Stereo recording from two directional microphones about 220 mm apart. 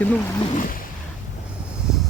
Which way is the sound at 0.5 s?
40° left (ahead or behind).